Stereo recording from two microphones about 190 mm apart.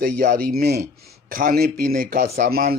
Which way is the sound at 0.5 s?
60° right (ahead or behind).